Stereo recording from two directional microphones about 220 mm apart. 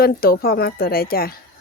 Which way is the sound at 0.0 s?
45° left (ahead or behind).